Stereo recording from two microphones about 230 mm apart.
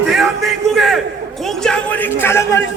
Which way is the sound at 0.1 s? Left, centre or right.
Centre.